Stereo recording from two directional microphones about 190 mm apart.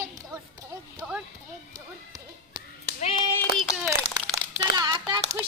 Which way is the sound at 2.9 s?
35° left (ahead or behind).